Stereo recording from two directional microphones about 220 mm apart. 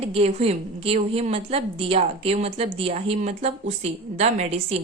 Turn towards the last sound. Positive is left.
turn(degrees=-30)  # may be behind; listen again after turning